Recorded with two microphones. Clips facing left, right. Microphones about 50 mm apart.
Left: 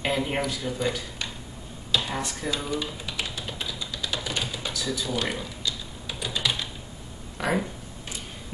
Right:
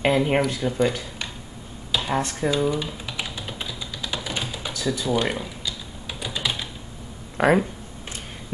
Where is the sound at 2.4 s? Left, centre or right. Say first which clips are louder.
Right 7 dB; centre.